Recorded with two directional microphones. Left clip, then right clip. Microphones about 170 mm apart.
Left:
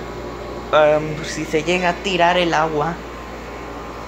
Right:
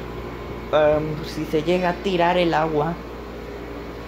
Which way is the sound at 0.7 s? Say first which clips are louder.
Left 4 dB; 20° right (ahead or behind).